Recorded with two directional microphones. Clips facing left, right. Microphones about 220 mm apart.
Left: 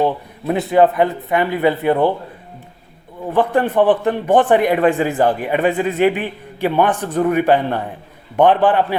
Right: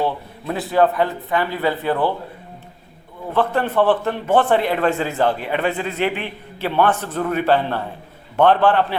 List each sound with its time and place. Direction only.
0.0 s a man's voice: 20° left (ahead or behind)
3.3 s a man's voice: 15° left (ahead or behind)